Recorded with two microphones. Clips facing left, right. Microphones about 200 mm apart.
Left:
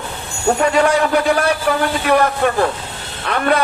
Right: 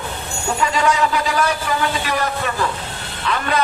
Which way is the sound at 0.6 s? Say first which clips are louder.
Left 3 dB; 60° left (ahead or behind).